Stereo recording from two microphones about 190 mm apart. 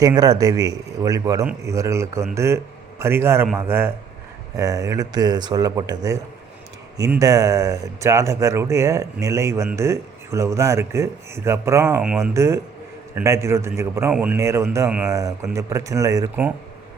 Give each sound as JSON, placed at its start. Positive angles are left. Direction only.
{"t": 0.0, "sound": "speech", "side_deg": -20}
{"t": 15.1, "sound": "speech", "side_deg": -15}